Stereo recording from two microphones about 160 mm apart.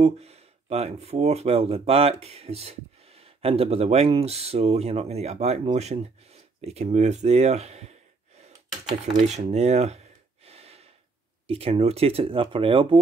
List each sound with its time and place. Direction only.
0.0 s speech: 40° right (ahead or behind)
9.0 s a sound: 45° right (ahead or behind)
11.4 s speech: 35° right (ahead or behind)